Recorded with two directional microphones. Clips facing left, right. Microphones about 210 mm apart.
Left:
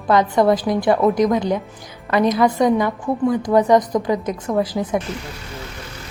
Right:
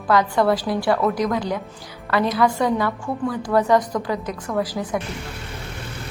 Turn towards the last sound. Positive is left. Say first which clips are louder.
# left 4 dB
turn(degrees=20)  # may be behind; listen again after turning